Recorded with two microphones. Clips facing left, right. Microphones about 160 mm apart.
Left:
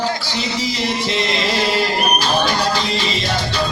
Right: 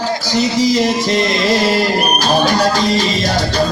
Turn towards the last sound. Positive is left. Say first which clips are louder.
# right 5 dB
turn(degrees=-40)  # may be behind; listen again after turning